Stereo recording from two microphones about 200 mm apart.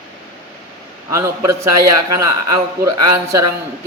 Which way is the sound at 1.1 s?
15° right (ahead or behind).